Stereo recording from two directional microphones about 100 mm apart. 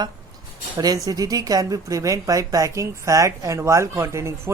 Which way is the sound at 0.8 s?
35° right (ahead or behind).